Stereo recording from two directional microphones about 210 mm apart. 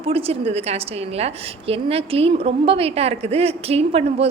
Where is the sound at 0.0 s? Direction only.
25° right (ahead or behind).